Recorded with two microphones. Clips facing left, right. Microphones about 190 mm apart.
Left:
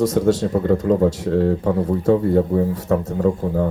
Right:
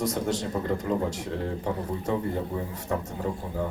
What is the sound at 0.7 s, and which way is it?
A man's voice, 65° left (ahead or behind).